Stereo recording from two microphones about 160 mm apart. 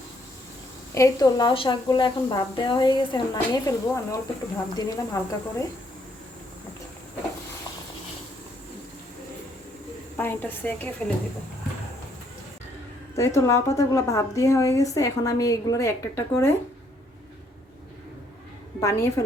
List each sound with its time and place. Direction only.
0.9 s a woman's voice: 20° left (ahead or behind)
10.2 s a woman's voice: 10° left (ahead or behind)
13.1 s a woman's voice: 20° left (ahead or behind)
18.8 s a woman's voice: 20° left (ahead or behind)